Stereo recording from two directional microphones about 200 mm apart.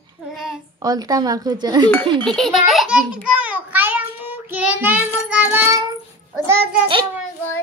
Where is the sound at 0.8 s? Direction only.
20° right (ahead or behind).